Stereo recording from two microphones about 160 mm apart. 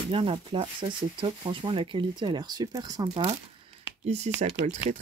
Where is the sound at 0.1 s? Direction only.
35° right (ahead or behind).